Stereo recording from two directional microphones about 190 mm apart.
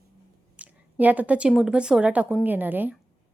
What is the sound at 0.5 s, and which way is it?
A woman's voice, 10° right (ahead or behind).